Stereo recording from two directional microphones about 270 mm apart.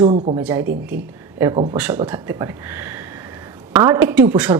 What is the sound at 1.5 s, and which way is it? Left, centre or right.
Speech, centre.